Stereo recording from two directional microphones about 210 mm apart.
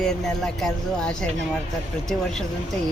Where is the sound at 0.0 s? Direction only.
5° left (ahead or behind).